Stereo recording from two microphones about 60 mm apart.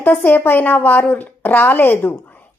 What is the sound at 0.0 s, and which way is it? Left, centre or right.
A woman's voice, left.